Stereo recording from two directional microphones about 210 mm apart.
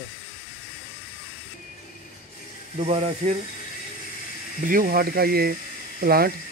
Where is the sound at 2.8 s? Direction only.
30° right (ahead or behind).